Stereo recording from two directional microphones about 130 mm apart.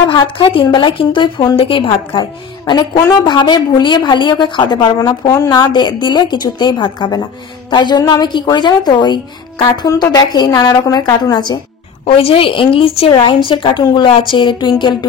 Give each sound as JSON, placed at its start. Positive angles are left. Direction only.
{"t": 0.1, "sound": "a woman's voice", "side_deg": 40}
{"t": 12.2, "sound": "a woman's voice", "side_deg": 45}